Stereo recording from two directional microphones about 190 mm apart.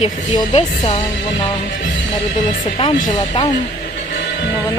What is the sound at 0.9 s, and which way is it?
Speech, 25° left (ahead or behind).